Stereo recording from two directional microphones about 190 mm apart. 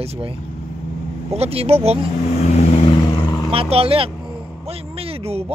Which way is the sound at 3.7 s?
30° right (ahead or behind).